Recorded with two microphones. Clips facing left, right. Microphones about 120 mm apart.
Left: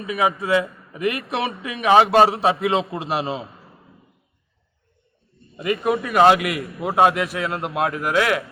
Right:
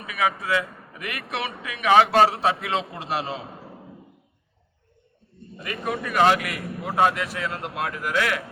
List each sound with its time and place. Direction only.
0.0 s a man's voice: 25° left (ahead or behind)
3.5 s a sound: 55° right (ahead or behind)
5.5 s a man's voice: 20° left (ahead or behind)